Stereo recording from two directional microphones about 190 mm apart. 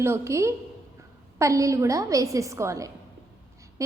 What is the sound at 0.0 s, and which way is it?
A woman's voice, 15° right (ahead or behind).